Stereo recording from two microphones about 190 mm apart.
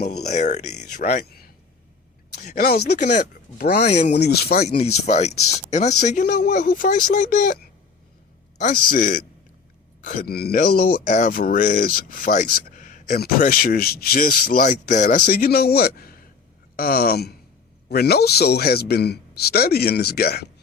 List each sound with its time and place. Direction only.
0.0 s a man's voice: 60° left (ahead or behind)
0.3 s speech: 35° left (ahead or behind)
1.2 s a man's voice: 55° left (ahead or behind)
2.5 s a man's voice: 55° left (ahead or behind)
3.0 s speech: 40° left (ahead or behind)
3.6 s a man's voice: 60° left (ahead or behind)
3.8 s speech: 35° left (ahead or behind)
4.1 s a man's voice: 60° left (ahead or behind)
4.8 s a man's voice: 35° left (ahead or behind); by 20.5 s 55° left (ahead or behind)